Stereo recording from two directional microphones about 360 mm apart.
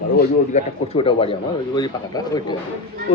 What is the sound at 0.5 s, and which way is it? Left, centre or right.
Speech, centre.